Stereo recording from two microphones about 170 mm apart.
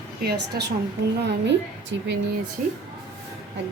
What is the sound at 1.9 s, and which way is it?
Speech, 90° right.